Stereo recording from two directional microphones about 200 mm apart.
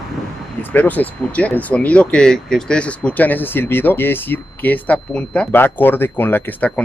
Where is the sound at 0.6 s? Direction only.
10° left (ahead or behind).